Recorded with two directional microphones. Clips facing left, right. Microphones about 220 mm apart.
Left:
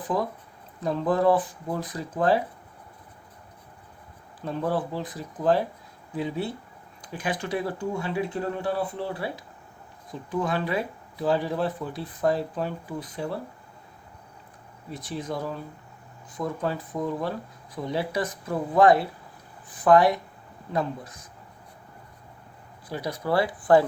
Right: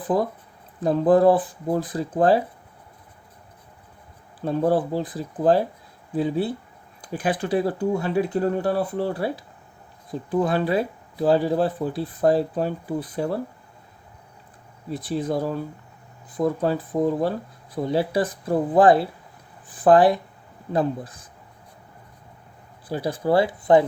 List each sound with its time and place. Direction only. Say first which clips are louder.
0.1 s speech: right 5 dB; 30° right (ahead or behind)
4.4 s speech: right 6 dB; 35° right (ahead or behind)
14.8 s speech: right 7 dB; 35° right (ahead or behind)
22.9 s speech: right 5 dB; 30° right (ahead or behind)